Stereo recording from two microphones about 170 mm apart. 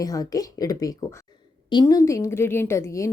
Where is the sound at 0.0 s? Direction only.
20° left (ahead or behind).